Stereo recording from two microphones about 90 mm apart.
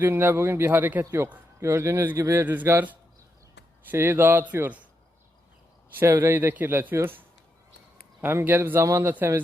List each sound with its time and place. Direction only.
0.0 s a man's voice: 25° right (ahead or behind)
6.0 s a man's voice: 30° right (ahead or behind)